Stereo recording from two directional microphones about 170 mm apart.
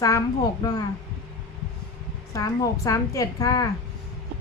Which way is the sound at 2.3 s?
20° left (ahead or behind).